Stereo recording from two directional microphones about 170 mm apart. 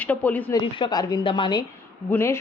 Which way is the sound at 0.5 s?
25° left (ahead or behind).